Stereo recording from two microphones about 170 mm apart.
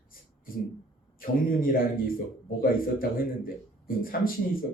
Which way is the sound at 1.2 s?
55° left (ahead or behind).